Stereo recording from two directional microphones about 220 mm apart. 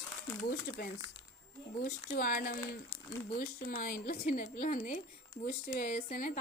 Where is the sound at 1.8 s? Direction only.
40° left (ahead or behind).